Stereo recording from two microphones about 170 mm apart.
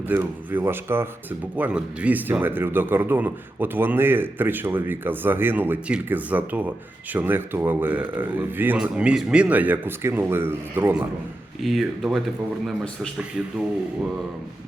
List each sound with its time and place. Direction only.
0.1 s speech: 10° right (ahead or behind)
11.6 s speech: centre (ahead or behind)